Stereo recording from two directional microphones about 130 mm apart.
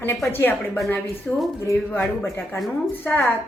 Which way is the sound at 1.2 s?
10° left (ahead or behind).